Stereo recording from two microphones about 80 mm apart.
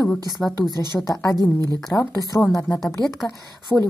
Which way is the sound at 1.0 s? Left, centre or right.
Left.